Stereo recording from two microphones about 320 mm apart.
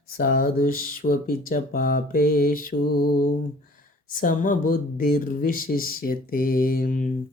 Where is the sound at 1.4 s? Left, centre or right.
Left.